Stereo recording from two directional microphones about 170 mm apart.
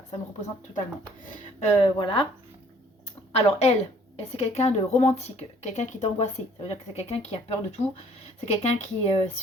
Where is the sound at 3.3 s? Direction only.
40° left (ahead or behind).